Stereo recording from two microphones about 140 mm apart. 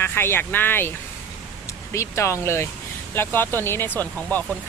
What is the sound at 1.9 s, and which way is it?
Speech, 20° left (ahead or behind).